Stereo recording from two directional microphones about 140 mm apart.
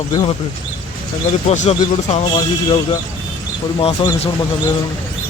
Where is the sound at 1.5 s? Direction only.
55° left (ahead or behind).